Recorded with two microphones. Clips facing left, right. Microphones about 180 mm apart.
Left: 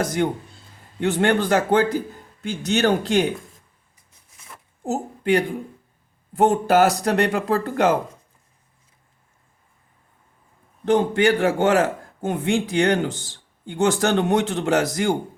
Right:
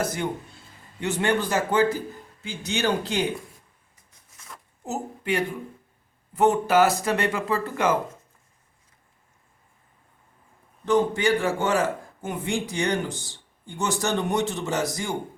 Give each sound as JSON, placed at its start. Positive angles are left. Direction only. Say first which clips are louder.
{"t": 0.2, "sound": "speech", "louder": "left 6 dB", "side_deg": 65}
{"t": 4.9, "sound": "a woman's voice", "louder": "left 7 dB", "side_deg": 45}
{"t": 7.0, "sound": "speech", "louder": "left 5 dB", "side_deg": 65}
{"t": 10.9, "sound": "a man's voice", "louder": "left 3 dB", "side_deg": 55}